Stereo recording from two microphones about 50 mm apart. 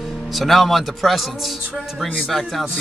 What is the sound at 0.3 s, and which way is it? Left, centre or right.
A man's voice, centre.